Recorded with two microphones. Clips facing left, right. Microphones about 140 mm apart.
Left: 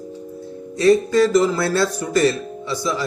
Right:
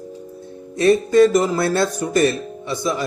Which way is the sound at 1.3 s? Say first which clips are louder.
Left 1 dB; 50° right (ahead or behind).